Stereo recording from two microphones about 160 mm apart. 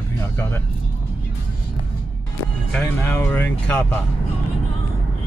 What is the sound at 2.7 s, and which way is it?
Speech, 10° left (ahead or behind).